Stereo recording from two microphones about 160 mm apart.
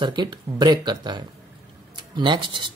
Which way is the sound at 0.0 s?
30° right (ahead or behind).